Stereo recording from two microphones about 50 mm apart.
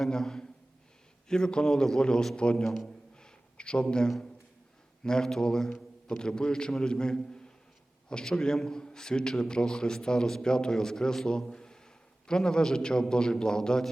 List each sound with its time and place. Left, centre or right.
0.0 s a man's voice: centre
2.6 s a sound: centre
5.0 s a man's voice: centre